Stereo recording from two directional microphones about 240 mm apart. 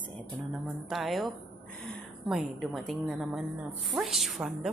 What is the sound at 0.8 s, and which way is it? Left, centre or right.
A woman's voice, centre.